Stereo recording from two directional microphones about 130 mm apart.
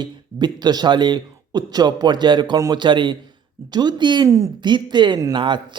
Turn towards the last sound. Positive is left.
turn(degrees=-35)  # may be behind; listen again after turning